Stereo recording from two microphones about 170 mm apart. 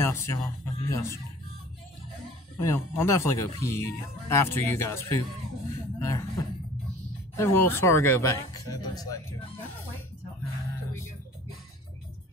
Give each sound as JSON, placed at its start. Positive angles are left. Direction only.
{"t": 0.0, "sound": "speech", "side_deg": 15}
{"t": 2.6, "sound": "speech", "side_deg": 15}